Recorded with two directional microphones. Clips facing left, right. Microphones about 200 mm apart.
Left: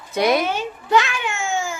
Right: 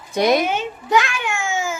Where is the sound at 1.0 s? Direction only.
Centre (ahead or behind).